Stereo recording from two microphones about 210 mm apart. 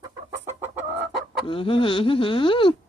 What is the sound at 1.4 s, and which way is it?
A woman's voice, 25° left (ahead or behind).